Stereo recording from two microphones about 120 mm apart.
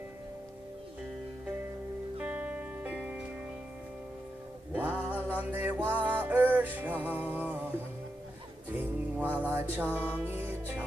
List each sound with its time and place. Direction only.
2.1 s music: 15° right (ahead or behind)
4.7 s music: 15° right (ahead or behind)
8.7 s music: 15° right (ahead or behind)